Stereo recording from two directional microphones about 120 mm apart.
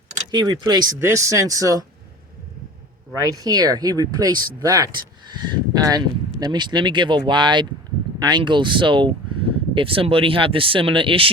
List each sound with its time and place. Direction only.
0.3 s speech: 35° right (ahead or behind)
3.2 s speech: 30° right (ahead or behind); by 11.3 s 45° right (ahead or behind)